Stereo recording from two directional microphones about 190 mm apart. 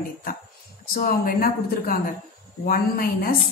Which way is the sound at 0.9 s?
50° left (ahead or behind).